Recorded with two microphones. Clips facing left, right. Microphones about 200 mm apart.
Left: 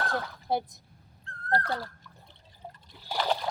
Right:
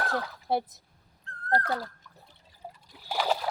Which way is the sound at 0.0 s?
Centre (ahead or behind).